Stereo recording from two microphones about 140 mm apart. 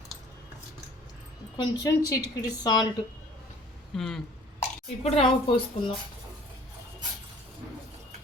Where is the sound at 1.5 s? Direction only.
25° left (ahead or behind).